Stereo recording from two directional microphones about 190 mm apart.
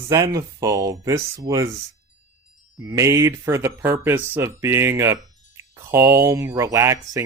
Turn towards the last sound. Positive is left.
turn(degrees=-15)  # may be behind; listen again after turning